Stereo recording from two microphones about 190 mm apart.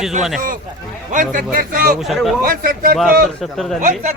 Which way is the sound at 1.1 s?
45° right (ahead or behind).